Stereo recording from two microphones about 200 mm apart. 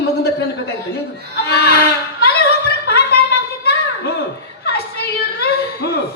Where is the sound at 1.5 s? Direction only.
55° left (ahead or behind).